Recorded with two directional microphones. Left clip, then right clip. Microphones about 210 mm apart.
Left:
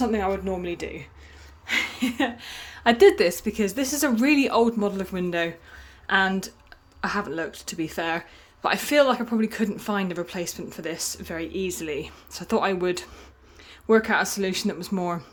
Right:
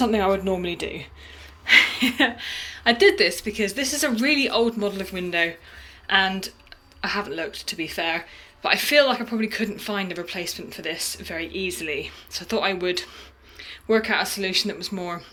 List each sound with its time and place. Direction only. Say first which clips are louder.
0.0 s speech: right 4 dB; centre (ahead or behind)
2.6 s speech: left 1 dB; 40° left (ahead or behind)